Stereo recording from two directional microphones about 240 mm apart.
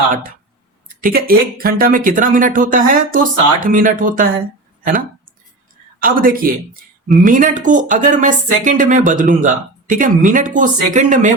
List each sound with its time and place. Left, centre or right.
0.1 s speech: right
6.0 s speech: right